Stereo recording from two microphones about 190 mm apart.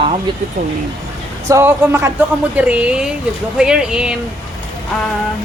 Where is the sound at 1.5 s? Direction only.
15° right (ahead or behind).